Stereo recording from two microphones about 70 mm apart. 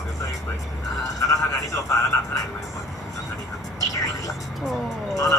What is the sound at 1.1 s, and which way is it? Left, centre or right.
Speech, left.